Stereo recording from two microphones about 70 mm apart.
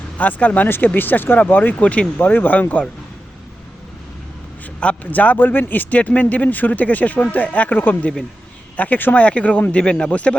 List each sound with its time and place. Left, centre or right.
0.2 s a man's voice: left
4.8 s a man's voice: centre